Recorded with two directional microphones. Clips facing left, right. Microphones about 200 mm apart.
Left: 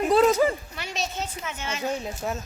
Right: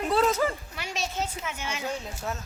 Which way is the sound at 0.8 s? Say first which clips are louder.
Even; 10° right (ahead or behind).